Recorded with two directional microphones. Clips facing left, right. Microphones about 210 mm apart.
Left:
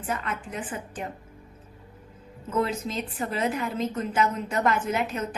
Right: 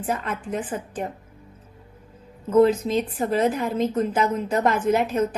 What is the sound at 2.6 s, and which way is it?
A woman's voice, 45° right (ahead or behind).